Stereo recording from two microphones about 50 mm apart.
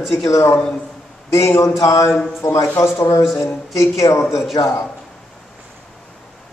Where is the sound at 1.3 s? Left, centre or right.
Left.